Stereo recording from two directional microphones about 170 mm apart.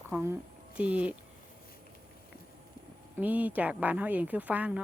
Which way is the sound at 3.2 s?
10° right (ahead or behind).